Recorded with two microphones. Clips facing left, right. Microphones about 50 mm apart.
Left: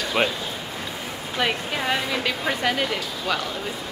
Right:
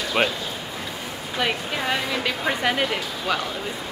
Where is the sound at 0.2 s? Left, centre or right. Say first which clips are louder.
Right 1 dB; centre.